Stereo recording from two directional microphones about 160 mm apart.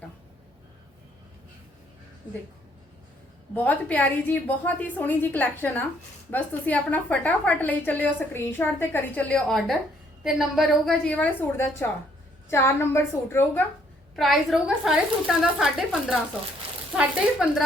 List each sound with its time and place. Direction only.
3.5 s a woman's voice: 10° left (ahead or behind)
14.2 s a woman's voice: centre (ahead or behind)